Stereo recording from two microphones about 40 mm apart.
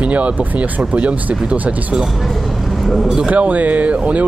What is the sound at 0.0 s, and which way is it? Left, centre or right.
Speech, right.